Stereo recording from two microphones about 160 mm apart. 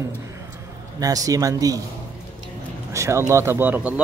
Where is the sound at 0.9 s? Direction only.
20° right (ahead or behind).